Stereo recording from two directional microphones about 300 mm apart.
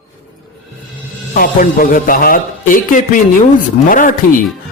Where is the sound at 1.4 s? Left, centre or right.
Left.